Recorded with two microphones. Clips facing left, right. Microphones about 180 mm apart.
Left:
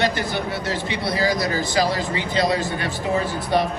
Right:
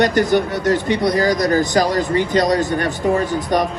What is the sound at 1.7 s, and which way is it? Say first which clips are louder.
Speech: right 5 dB; 45° right (ahead or behind).